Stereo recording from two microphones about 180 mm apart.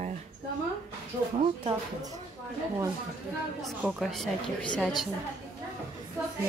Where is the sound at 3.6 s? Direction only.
Centre (ahead or behind).